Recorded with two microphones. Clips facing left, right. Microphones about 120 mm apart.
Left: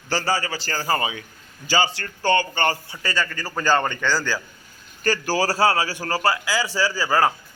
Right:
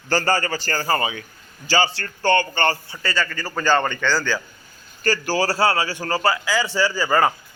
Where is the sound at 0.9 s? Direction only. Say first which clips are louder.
Right 1 dB; 20° left (ahead or behind).